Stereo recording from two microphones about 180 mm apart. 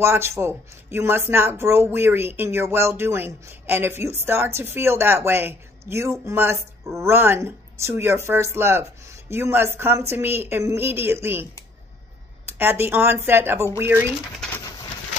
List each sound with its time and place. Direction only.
0.0 s speech: 15° right (ahead or behind)
12.4 s speech: 10° right (ahead or behind)